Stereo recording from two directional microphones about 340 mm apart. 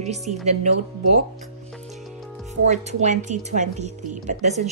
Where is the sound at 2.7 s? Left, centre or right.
Right.